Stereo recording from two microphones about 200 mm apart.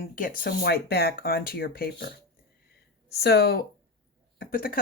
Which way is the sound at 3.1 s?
55° left (ahead or behind).